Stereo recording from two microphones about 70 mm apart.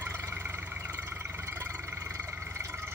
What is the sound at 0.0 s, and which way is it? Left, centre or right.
Vehicle, right.